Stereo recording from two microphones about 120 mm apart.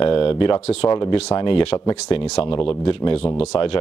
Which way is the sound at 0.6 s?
60° left (ahead or behind).